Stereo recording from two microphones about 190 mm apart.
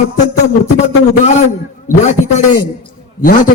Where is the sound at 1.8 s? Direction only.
40° left (ahead or behind).